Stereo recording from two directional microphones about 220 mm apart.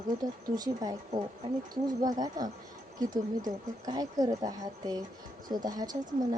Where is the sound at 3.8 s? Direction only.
15° right (ahead or behind).